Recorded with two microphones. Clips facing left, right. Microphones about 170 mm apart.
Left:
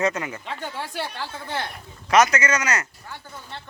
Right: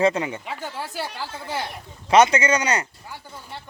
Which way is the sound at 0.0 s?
30° right (ahead or behind).